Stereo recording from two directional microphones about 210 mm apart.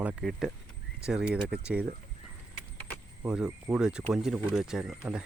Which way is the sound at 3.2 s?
5° right (ahead or behind).